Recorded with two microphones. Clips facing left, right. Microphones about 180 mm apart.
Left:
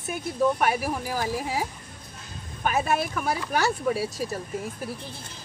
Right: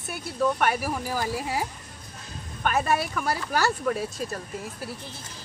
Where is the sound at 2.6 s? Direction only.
5° left (ahead or behind).